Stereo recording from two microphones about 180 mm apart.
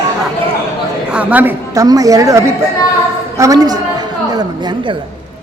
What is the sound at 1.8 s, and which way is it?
A woman's voice, 20° right (ahead or behind).